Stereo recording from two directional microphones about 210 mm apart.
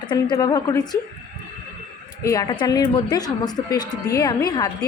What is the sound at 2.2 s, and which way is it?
A woman's voice, 15° left (ahead or behind).